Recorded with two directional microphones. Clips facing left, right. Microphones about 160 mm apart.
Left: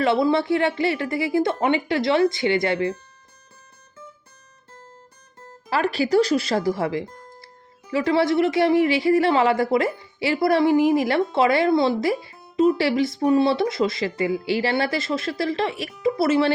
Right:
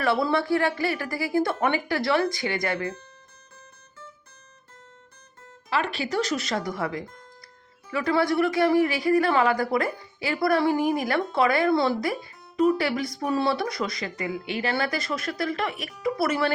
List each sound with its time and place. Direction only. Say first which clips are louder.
0.0 s speech: left 4 dB; 20° left (ahead or behind)
5.5 s speech: left 4 dB; 40° left (ahead or behind)